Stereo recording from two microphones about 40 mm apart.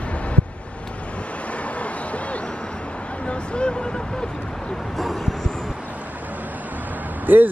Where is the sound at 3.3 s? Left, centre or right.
Left.